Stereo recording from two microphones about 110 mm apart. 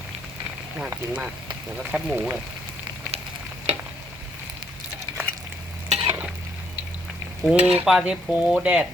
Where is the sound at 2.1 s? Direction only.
20° right (ahead or behind).